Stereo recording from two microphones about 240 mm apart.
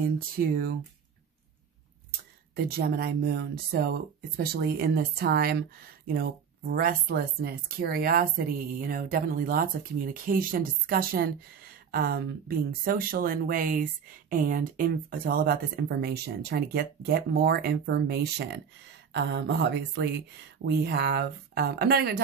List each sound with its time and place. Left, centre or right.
2.0 s speech: right